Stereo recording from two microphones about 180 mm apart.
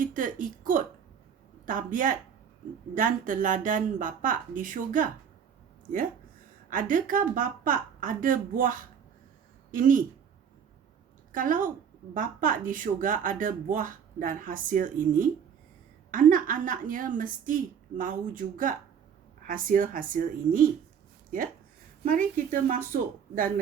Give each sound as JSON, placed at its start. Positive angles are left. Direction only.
{"t": 0.0, "sound": "speech", "side_deg": -45}
{"t": 6.7, "sound": "speech", "side_deg": -50}
{"t": 11.3, "sound": "a woman's voice", "side_deg": -50}